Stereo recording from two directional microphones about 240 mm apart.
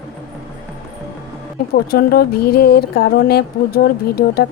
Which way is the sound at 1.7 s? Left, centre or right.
Left.